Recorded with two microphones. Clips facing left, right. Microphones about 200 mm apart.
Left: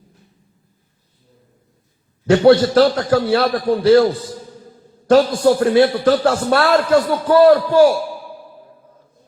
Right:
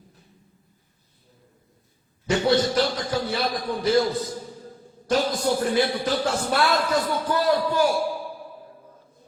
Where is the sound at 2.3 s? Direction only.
90° left.